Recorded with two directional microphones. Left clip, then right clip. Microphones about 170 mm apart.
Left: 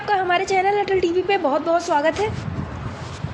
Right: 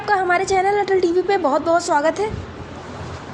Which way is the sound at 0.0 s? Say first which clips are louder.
Right 2 dB; centre (ahead or behind).